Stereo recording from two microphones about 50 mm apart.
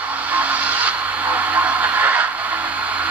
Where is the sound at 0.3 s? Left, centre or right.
Right.